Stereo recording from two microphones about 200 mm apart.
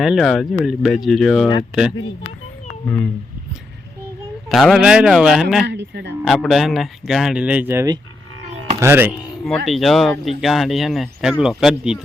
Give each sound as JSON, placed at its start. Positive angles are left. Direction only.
{"t": 0.0, "sound": "speech", "side_deg": 0}
{"t": 2.8, "sound": "speech", "side_deg": 10}
{"t": 4.4, "sound": "speech", "side_deg": 0}
{"t": 5.6, "sound": "speech", "side_deg": -60}
{"t": 6.2, "sound": "speech", "side_deg": 0}